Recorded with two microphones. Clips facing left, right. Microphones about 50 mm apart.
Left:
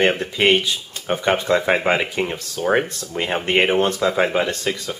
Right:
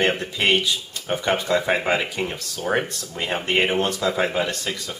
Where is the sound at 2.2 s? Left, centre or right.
Left.